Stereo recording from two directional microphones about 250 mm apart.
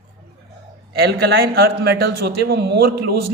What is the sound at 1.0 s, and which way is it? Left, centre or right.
A man's voice, right.